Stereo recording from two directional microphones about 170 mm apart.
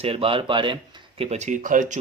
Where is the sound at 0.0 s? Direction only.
35° right (ahead or behind).